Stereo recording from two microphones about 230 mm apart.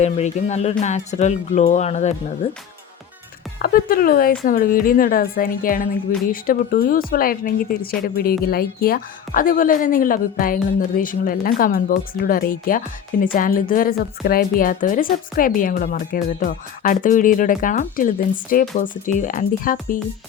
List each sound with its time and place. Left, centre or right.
0.0 s speech: left
3.6 s a woman's voice: left